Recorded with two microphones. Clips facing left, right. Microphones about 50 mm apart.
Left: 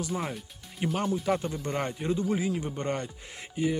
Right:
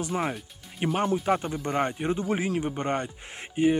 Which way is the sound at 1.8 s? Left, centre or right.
Right.